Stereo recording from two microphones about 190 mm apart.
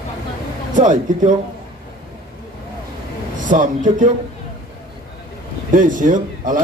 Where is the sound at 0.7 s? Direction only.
40° right (ahead or behind).